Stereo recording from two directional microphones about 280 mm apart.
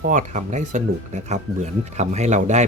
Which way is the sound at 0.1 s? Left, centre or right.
Right.